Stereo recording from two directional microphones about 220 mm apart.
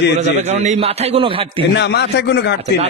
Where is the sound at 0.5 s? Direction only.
30° right (ahead or behind).